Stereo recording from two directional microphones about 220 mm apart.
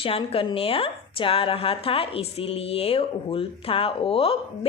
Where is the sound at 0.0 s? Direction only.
25° left (ahead or behind).